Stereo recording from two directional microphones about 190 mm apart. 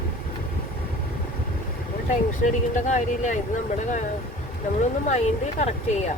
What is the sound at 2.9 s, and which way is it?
Speech, 40° left (ahead or behind).